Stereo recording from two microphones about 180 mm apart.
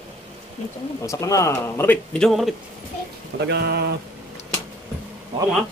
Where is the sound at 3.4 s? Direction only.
70° right (ahead or behind).